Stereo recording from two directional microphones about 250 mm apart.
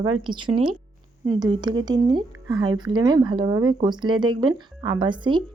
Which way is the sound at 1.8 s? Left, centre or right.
Centre.